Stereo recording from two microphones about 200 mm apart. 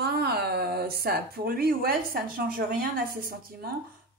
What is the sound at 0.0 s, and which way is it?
Speech, 55° right (ahead or behind).